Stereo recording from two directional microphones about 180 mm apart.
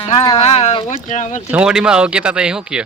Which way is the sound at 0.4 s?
35° left (ahead or behind).